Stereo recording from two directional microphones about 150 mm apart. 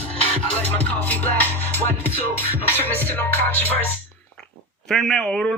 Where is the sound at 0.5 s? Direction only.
10° left (ahead or behind).